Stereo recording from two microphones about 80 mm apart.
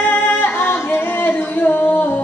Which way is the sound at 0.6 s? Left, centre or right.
Left.